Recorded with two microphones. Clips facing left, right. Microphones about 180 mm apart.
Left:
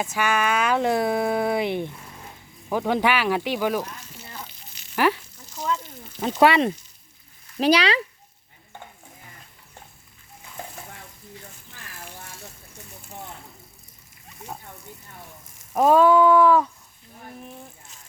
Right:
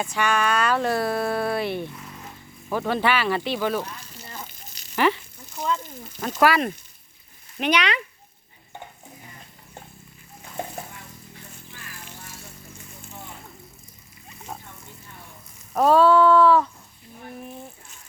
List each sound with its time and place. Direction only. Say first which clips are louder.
0.0 s speech: even; 5° left (ahead or behind)
4.2 s a sound: right 1 dB; centre (ahead or behind)
4.4 s a sound: right 1 dB; 45° right (ahead or behind)
4.9 s speech: even; 10° left (ahead or behind)
6.1 s speech: left 2 dB; 25° left (ahead or behind)
15.7 s speech: even; 10° left (ahead or behind)